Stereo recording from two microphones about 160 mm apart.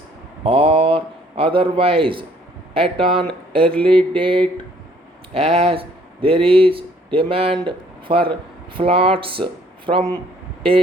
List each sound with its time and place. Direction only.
0.4 s a man's voice: 35° right (ahead or behind)